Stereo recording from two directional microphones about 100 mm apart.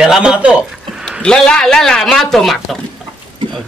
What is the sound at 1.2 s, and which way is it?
Speech, 10° left (ahead or behind).